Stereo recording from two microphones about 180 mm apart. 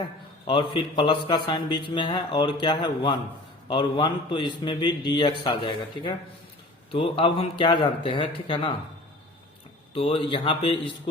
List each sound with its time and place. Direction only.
0.4 s a man's voice: 25° left (ahead or behind)
9.9 s a man's voice: 30° left (ahead or behind)